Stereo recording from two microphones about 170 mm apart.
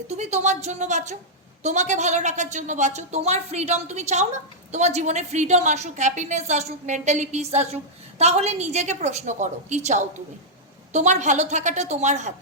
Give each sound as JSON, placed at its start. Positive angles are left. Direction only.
{"t": 0.1, "sound": "a woman's voice", "side_deg": -40}